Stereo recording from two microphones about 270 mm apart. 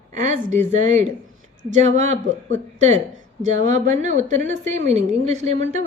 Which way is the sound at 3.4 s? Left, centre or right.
Right.